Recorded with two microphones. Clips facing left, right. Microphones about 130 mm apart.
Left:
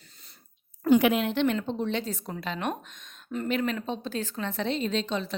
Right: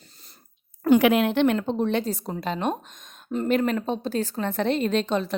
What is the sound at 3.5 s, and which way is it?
A woman's voice, 45° right (ahead or behind).